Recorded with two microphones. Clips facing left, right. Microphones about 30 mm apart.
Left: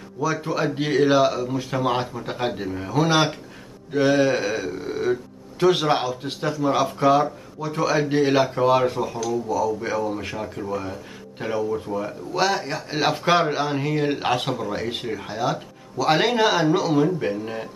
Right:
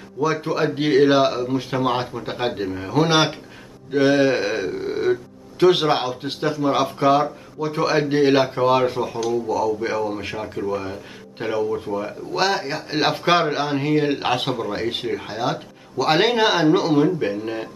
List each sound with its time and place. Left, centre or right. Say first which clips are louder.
0.2 s speech: right 3 dB; right